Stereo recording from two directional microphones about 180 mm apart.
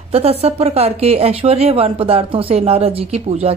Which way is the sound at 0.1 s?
35° right (ahead or behind).